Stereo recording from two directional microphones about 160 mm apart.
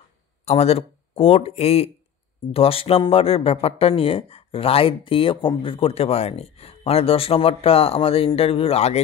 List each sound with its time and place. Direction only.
0.5 s speech: 40° left (ahead or behind)